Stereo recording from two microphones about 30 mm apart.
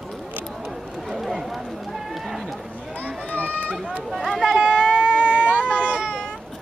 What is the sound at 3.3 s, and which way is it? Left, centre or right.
Run, left.